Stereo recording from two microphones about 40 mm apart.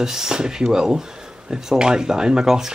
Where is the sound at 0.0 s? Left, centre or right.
Centre.